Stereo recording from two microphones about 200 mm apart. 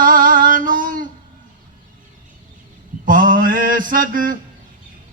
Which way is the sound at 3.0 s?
45° right (ahead or behind).